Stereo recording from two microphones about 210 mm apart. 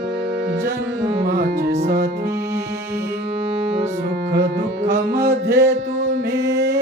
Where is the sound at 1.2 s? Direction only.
50° right (ahead or behind).